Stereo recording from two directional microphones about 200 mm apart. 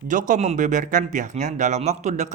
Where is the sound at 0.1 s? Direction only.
40° right (ahead or behind).